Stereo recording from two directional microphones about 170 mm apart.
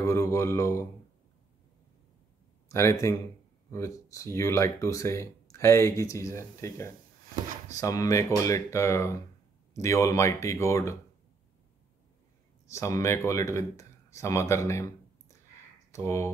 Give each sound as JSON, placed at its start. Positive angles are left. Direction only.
{"t": 0.0, "sound": "mantra", "side_deg": 20}
{"t": 2.7, "sound": "speech", "side_deg": 15}
{"t": 12.6, "sound": "speech", "side_deg": 15}